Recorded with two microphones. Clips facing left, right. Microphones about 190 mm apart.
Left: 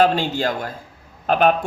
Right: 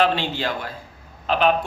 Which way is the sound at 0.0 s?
45° left (ahead or behind).